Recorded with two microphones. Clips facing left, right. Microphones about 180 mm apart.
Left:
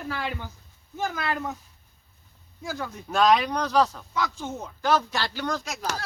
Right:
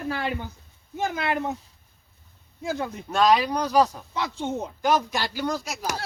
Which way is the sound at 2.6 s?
25° right (ahead or behind).